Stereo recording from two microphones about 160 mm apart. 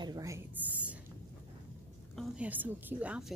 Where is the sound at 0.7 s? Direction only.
10° right (ahead or behind).